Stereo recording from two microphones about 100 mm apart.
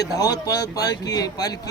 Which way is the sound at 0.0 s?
40° left (ahead or behind).